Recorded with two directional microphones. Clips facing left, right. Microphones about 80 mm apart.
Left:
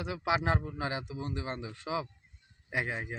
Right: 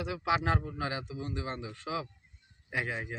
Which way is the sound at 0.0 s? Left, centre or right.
Left.